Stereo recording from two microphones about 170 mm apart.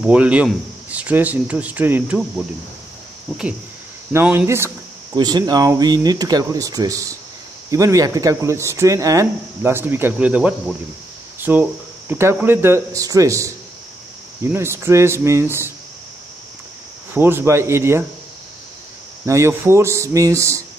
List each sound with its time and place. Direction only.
0.0 s speech: 10° right (ahead or behind)
4.1 s speech: 10° right (ahead or behind)
5.1 s speech: 25° right (ahead or behind); by 10.5 s 5° right (ahead or behind)
11.3 s a sound: 10° right (ahead or behind)
12.1 s speech: 15° right (ahead or behind)
17.1 s speech: 15° right (ahead or behind)
19.2 s speech: 15° right (ahead or behind)